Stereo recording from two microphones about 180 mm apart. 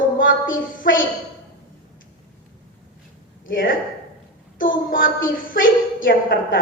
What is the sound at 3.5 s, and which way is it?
A woman's voice, 50° left (ahead or behind).